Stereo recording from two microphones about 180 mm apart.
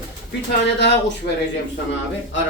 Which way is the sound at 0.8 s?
70° left (ahead or behind).